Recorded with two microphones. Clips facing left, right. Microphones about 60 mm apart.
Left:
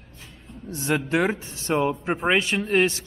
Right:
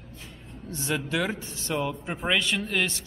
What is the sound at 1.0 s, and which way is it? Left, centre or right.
Speech, left.